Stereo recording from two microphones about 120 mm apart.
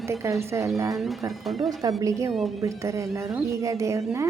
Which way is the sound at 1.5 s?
Centre (ahead or behind).